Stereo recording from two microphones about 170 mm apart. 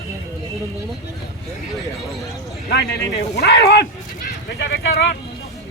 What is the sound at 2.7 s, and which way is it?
Speech, 70° left (ahead or behind).